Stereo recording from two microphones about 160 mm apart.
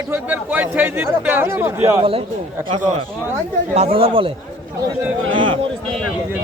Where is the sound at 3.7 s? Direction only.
40° right (ahead or behind).